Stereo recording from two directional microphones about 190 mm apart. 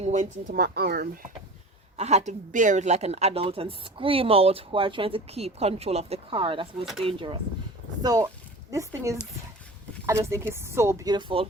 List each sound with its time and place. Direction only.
0.0 s speech: 40° right (ahead or behind); by 1.3 s 55° right (ahead or behind)
2.0 s a woman's voice: 35° right (ahead or behind)